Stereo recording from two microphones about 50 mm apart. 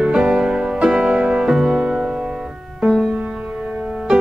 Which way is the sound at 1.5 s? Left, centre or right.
Centre.